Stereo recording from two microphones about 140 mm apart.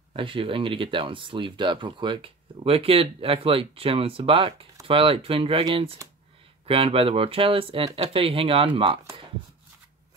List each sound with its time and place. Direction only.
0.1 s speech: 40° right (ahead or behind)